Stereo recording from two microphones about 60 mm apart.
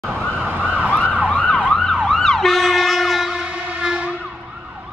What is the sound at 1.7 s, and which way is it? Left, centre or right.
Emergency vehicle, centre.